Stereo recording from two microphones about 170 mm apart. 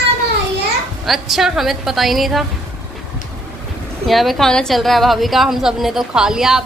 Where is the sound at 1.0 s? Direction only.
Centre (ahead or behind).